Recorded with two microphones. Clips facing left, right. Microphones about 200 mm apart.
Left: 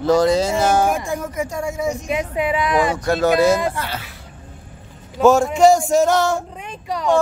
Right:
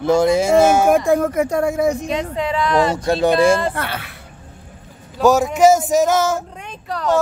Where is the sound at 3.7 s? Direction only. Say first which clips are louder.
Right 2 dB; 60° right (ahead or behind).